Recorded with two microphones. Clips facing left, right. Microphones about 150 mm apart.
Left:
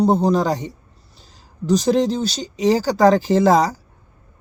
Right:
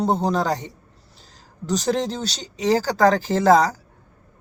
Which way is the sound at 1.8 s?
10° left (ahead or behind).